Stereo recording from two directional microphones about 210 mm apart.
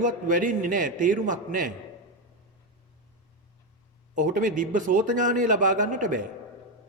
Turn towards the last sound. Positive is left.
turn(degrees=-40)  # may be behind; listen again after turning